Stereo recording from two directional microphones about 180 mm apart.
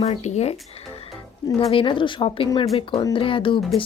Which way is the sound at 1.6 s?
30° left (ahead or behind).